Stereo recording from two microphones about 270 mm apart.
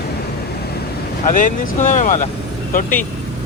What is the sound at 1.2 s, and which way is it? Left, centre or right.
Speech, left.